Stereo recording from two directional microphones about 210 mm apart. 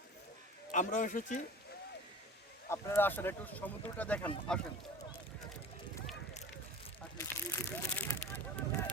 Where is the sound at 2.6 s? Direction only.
10° left (ahead or behind).